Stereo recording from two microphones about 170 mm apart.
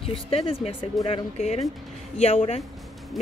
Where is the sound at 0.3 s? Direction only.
35° left (ahead or behind).